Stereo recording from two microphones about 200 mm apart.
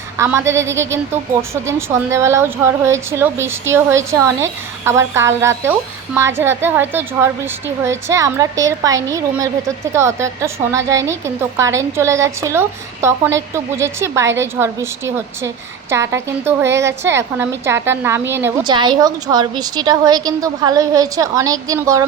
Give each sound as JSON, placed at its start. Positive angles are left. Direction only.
{"t": 0.2, "sound": "a woman's voice", "side_deg": -15}
{"t": 18.7, "sound": "a woman's voice", "side_deg": -20}